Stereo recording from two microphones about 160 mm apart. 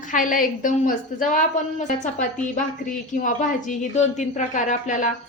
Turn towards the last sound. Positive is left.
turn(degrees=50)  # may be behind; listen again after turning